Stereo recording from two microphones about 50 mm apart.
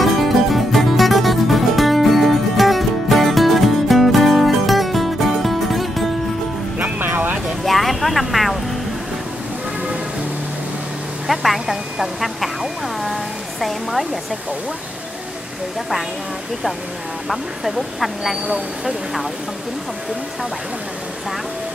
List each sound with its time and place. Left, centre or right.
0.0 s music: centre
6.8 s music: right
7.6 s vehicle: centre
11.2 s vehicle: centre
13.0 s a sound: centre
17.3 s speech: centre